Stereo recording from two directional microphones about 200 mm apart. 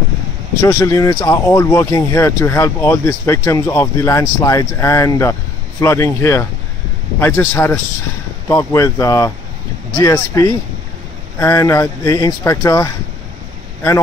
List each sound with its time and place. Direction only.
0.6 s speech: 15° left (ahead or behind)